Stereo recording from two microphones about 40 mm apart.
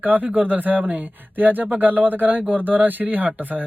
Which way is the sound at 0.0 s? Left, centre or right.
Right.